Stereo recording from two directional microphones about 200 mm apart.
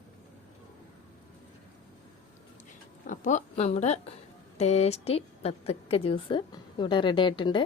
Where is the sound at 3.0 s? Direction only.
40° left (ahead or behind).